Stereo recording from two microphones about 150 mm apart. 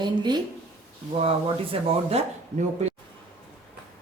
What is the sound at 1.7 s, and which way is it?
Speech, 40° right (ahead or behind).